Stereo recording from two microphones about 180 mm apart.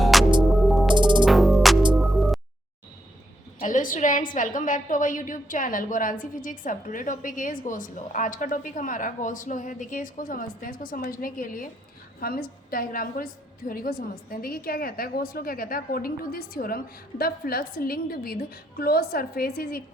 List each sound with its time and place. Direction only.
0.0 s music: centre (ahead or behind)
0.9 s music: 25° right (ahead or behind)
1.2 s music: centre (ahead or behind)
3.6 s a woman's voice: 45° left (ahead or behind)